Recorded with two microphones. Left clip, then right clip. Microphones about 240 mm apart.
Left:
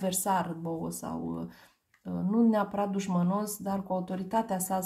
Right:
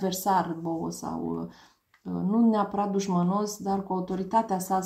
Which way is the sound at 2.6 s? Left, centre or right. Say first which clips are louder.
Right 3 dB; left.